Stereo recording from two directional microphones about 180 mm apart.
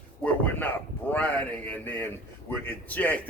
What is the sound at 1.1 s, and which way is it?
A man's voice, 10° left (ahead or behind).